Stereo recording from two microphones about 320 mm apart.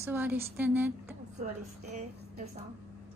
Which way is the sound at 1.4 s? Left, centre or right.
Right.